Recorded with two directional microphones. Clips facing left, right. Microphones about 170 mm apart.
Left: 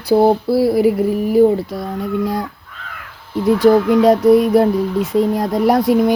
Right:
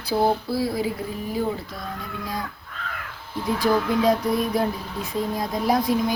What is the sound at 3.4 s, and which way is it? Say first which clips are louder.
Mantra: left 10 dB; 80° left.